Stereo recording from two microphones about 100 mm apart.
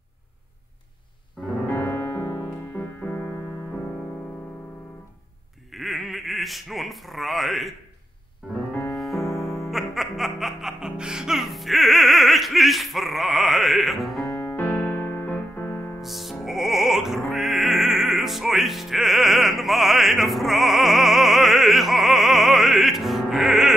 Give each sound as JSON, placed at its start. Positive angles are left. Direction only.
{"t": 1.7, "sound": "music", "side_deg": 20}
{"t": 5.7, "sound": "quack", "side_deg": 0}
{"t": 8.9, "sound": "music", "side_deg": 0}
{"t": 14.3, "sound": "music", "side_deg": 15}
{"t": 16.0, "sound": "music", "side_deg": 0}